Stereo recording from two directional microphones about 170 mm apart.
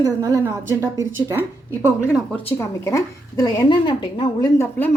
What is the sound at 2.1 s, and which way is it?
A woman's voice, 10° left (ahead or behind).